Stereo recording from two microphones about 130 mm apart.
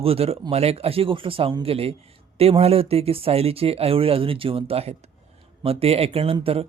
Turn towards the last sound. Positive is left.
turn(degrees=-50)  # may be behind; listen again after turning